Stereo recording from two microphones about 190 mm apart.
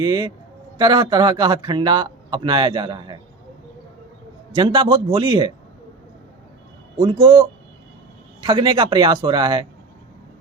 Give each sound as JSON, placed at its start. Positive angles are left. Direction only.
{"t": 0.0, "sound": "a man's voice", "side_deg": -20}
{"t": 4.5, "sound": "a man's voice", "side_deg": -25}
{"t": 7.0, "sound": "a man's voice", "side_deg": -25}